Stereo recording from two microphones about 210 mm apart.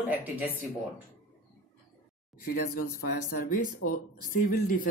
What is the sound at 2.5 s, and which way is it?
Speech, 45° left (ahead or behind).